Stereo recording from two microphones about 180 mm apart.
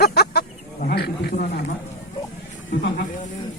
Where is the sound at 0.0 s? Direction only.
65° left (ahead or behind).